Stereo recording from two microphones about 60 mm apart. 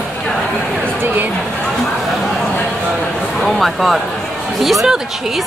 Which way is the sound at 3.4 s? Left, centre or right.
Centre.